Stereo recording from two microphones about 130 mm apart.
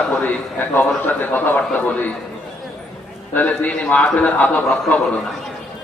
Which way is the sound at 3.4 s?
10° left (ahead or behind).